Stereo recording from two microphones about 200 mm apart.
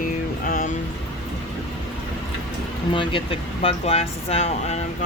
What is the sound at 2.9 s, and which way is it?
Speech, 25° left (ahead or behind).